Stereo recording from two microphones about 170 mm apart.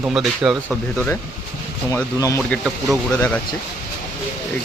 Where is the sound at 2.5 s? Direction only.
Centre (ahead or behind).